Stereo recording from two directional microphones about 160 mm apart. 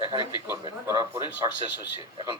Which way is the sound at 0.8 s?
25° right (ahead or behind).